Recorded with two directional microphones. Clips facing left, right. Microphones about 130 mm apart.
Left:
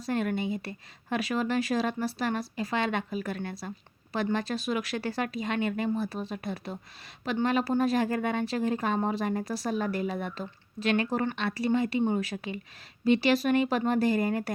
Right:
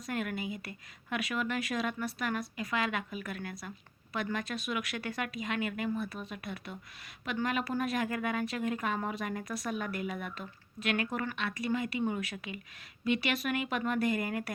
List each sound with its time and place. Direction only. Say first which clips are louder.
0.0 s a woman's voice: left 6 dB; 30° left (ahead or behind)